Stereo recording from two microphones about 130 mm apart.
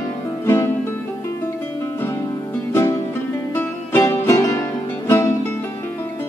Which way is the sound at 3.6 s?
20° left (ahead or behind).